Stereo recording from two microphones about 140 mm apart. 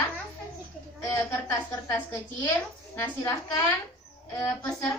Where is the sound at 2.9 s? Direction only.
15° left (ahead or behind).